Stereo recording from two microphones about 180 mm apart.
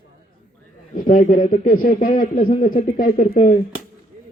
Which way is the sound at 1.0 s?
50° left (ahead or behind).